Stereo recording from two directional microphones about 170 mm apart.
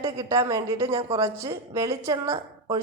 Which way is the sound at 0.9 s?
35° right (ahead or behind).